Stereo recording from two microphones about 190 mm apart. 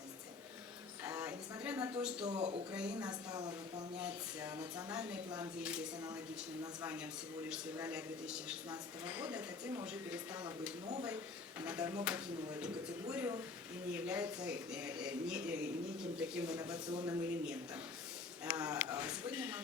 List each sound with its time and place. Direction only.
1.0 s a sound: 10° right (ahead or behind)
2.0 s speech: 5° right (ahead or behind)
2.2 s speech: 30° right (ahead or behind)
3.0 s speech: 20° right (ahead or behind)
3.9 s speech: 10° right (ahead or behind)
7.8 s speech: 10° right (ahead or behind)
11.6 s speech: 10° right (ahead or behind)
16.9 s speech: 20° right (ahead or behind)
17.2 s speech: 10° right (ahead or behind)